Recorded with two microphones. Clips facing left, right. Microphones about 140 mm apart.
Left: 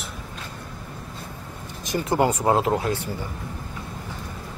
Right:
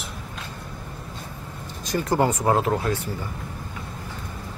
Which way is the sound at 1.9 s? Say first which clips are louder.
Even; 25° left (ahead or behind).